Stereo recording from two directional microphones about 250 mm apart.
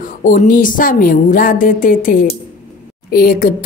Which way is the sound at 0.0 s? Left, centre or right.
Left.